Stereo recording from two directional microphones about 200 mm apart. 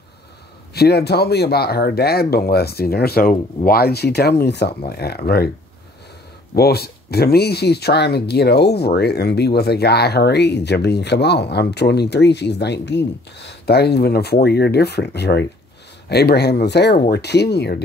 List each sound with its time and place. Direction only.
0.7 s speech: 50° left (ahead or behind)
6.5 s speech: 50° left (ahead or behind)